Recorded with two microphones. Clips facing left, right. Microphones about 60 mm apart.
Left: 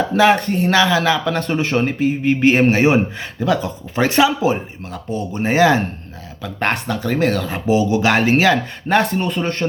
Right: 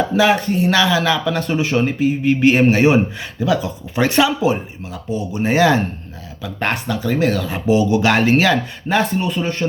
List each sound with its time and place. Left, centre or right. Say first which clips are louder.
0.2 s speech: left 2 dB; left
0.7 s a man's voice: left 2 dB; left
3.4 s speech: even; left
3.9 s speech: left 1 dB; left
5.1 s a man's voice: even; left
6.4 s speech: left 1 dB; left
7.4 s speech: right 1 dB; left
8.9 s speech: left 1 dB; left